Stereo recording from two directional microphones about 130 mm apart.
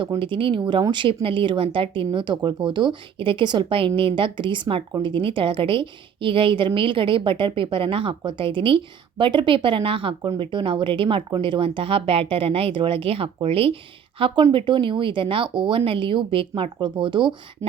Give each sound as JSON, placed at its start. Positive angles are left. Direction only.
{"t": 0.2, "sound": "a woman's voice", "side_deg": -40}